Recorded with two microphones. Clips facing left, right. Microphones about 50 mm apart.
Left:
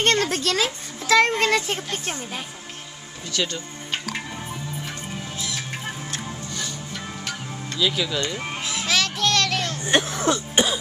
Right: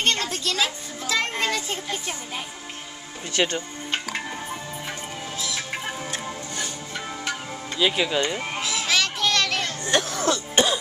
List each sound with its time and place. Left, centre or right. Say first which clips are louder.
0.0 s a child's voice: left 4 dB; left
3.3 s speech: right 3 dB; right
3.9 s music: right 1 dB; centre
5.9 s music: right 1 dB; centre
7.8 s speech: right 2 dB; right
8.4 s children playing: right 1 dB; centre
9.8 s speech: left 2 dB; left
10.5 s cough: right 1 dB; centre